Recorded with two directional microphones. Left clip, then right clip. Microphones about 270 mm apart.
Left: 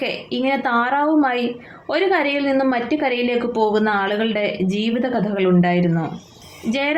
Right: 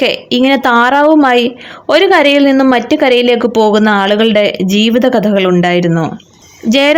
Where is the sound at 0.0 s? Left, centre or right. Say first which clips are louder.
Right 11 dB; right.